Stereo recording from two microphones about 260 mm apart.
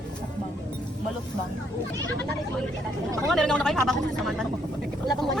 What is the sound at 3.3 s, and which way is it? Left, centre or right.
A woman's voice, centre.